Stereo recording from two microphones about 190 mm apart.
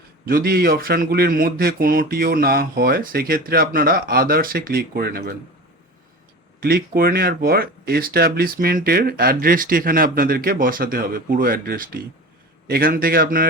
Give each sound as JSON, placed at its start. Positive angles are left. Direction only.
{"t": 0.3, "sound": "speech", "side_deg": -50}
{"t": 6.6, "sound": "speech", "side_deg": -50}